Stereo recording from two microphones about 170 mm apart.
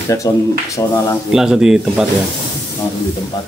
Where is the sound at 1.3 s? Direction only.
5° right (ahead or behind).